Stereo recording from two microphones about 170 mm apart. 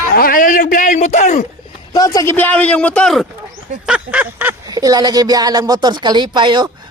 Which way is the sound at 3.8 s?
5° right (ahead or behind).